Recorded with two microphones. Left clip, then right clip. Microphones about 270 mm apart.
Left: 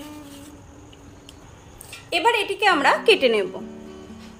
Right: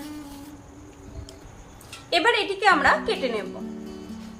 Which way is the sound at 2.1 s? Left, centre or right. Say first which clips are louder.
Left 1 dB; left.